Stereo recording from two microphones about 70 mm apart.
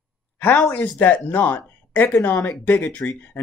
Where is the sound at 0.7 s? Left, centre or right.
Left.